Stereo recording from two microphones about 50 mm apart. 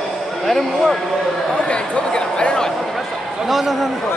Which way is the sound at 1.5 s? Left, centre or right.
Centre.